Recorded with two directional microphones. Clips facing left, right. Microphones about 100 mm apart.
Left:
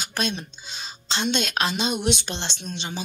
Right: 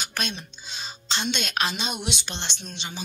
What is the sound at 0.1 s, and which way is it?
Speech, 35° left (ahead or behind).